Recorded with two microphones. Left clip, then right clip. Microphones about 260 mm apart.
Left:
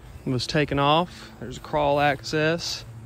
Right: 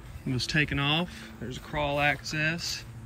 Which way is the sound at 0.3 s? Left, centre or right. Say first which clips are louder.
Left 3 dB; centre.